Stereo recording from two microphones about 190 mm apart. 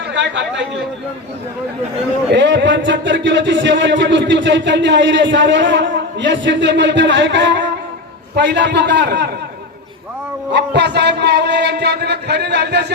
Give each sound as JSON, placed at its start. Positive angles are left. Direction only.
{"t": 0.1, "sound": "speech", "side_deg": -70}
{"t": 2.3, "sound": "a man's voice", "side_deg": -65}
{"t": 10.5, "sound": "a man's voice", "side_deg": -65}